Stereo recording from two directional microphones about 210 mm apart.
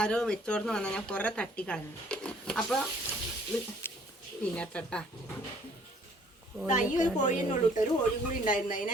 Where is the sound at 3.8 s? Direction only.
10° left (ahead or behind).